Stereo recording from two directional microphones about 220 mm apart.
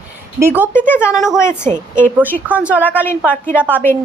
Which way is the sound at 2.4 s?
5° right (ahead or behind).